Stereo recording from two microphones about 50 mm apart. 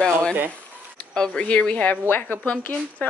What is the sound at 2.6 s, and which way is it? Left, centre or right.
Speech, left.